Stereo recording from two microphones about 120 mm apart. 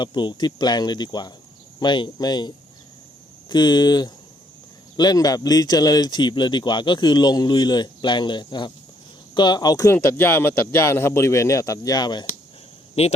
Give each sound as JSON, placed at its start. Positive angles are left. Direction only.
{"t": 0.0, "sound": "speech", "side_deg": 40}
{"t": 3.5, "sound": "speech", "side_deg": 40}
{"t": 13.0, "sound": "speech", "side_deg": 60}